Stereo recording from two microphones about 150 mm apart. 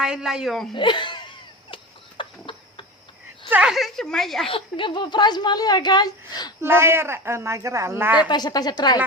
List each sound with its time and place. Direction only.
0.0 s speech: 5° right (ahead or behind)
0.7 s speech: 30° left (ahead or behind)
1.7 s a sound: 35° left (ahead or behind)
3.5 s speech: 5° right (ahead or behind)
4.4 s speech: 35° left (ahead or behind)
6.6 s a woman's voice: 15° right (ahead or behind)
8.3 s speech: 30° left (ahead or behind)